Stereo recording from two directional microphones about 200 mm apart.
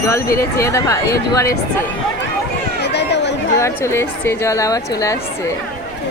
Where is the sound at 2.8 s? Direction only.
55° left (ahead or behind).